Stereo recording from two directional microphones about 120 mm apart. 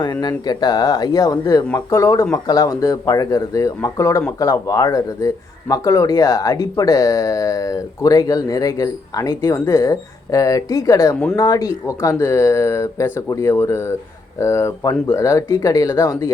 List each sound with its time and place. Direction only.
0.0 s speech: 35° left (ahead or behind)